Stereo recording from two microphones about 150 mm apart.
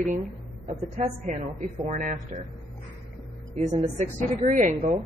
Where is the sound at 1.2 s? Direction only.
60° right (ahead or behind).